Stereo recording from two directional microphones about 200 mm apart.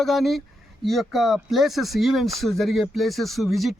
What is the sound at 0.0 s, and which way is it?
Speech, centre (ahead or behind).